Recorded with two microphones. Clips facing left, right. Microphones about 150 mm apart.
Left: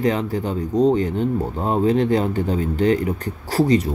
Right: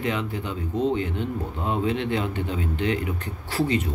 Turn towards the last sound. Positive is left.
turn(degrees=40)  # may be behind; listen again after turning